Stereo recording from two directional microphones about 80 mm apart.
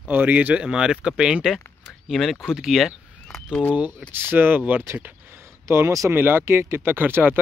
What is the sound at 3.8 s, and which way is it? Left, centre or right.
Speech, right.